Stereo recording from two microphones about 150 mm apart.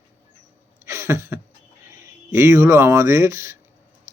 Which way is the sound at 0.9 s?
20° right (ahead or behind).